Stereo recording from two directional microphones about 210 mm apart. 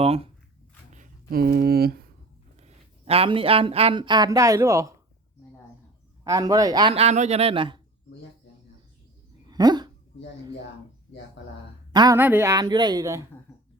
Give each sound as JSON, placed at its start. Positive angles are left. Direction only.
{"t": 0.0, "sound": "a man's voice", "side_deg": -30}
{"t": 0.9, "sound": "writing", "side_deg": -40}
{"t": 2.6, "sound": "speech", "side_deg": -30}
{"t": 6.2, "sound": "a man's voice", "side_deg": -15}
{"t": 9.5, "sound": "dog", "side_deg": -20}
{"t": 11.9, "sound": "speech", "side_deg": -20}